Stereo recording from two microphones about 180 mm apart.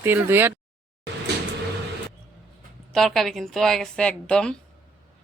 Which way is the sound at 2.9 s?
Centre (ahead or behind).